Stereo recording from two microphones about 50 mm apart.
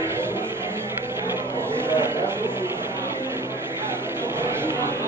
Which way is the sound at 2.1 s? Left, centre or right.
Right.